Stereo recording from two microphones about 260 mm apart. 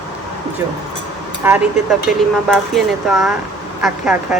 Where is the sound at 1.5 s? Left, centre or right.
Centre.